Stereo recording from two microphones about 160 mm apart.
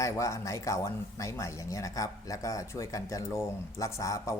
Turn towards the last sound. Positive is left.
turn(degrees=20)  # may be behind; listen again after turning